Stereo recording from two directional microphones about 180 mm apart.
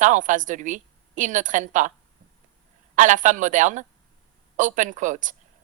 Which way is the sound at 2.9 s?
45° right (ahead or behind).